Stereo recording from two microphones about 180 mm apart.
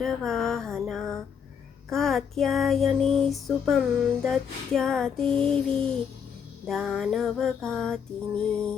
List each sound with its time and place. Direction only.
0.0 s music: centre (ahead or behind)